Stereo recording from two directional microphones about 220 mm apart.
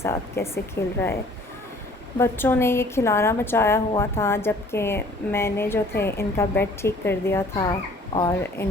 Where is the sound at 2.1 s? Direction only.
10° left (ahead or behind).